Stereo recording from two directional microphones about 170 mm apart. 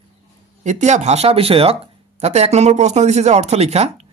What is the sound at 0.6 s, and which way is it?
Speech, 45° right (ahead or behind).